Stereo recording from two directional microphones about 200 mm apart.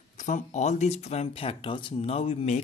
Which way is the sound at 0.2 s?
35° left (ahead or behind).